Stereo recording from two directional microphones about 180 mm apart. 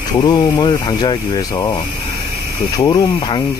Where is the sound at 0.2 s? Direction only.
25° left (ahead or behind).